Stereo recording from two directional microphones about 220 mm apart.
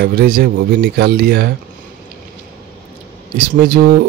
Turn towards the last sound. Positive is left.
turn(degrees=-40)  # may be behind; listen again after turning